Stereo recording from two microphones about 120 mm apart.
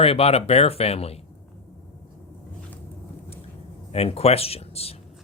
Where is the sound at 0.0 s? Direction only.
55° left (ahead or behind).